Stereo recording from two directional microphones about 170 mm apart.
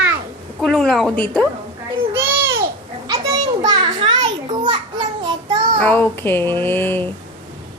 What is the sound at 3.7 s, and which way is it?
Children playing, 30° right (ahead or behind).